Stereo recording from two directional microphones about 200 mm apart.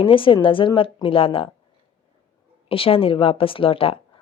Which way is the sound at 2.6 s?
30° left (ahead or behind).